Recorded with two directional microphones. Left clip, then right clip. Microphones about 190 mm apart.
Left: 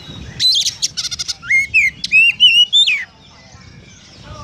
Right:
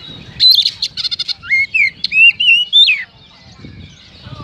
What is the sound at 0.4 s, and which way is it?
Bird, 20° left (ahead or behind).